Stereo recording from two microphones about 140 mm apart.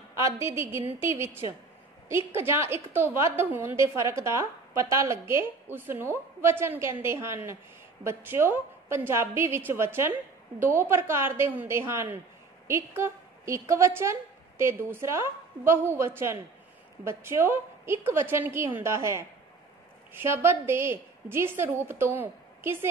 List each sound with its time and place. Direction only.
0.1 s a woman's voice: 20° right (ahead or behind)